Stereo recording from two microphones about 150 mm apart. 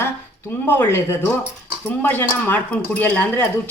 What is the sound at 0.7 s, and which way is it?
Speech, 15° left (ahead or behind).